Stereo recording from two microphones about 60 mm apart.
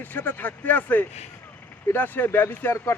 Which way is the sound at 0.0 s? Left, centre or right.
Left.